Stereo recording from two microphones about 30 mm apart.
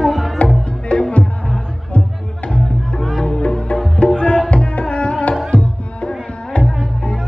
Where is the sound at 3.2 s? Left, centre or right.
Left.